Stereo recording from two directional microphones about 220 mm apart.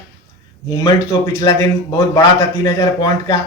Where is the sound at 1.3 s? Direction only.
15° left (ahead or behind).